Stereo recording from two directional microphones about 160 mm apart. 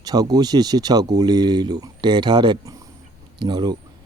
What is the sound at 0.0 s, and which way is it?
Speech, 25° right (ahead or behind).